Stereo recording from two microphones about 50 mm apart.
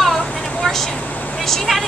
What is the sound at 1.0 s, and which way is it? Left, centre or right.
Vehicle, left.